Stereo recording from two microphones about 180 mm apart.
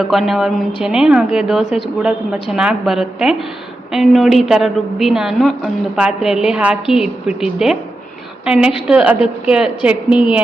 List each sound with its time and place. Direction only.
0.0 s a woman's voice: centre (ahead or behind)
10.1 s a woman's voice: 30° left (ahead or behind)